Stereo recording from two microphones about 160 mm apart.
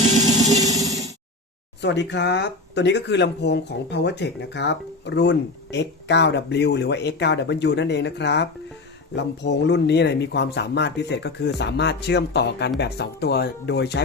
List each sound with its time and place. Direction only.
0.3 s music: 20° right (ahead or behind)
1.8 s speech: 90° left